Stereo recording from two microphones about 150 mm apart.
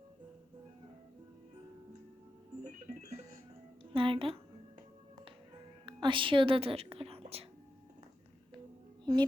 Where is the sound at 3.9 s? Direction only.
35° right (ahead or behind).